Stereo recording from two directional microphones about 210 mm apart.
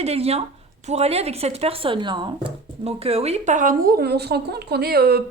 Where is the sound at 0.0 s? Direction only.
30° right (ahead or behind).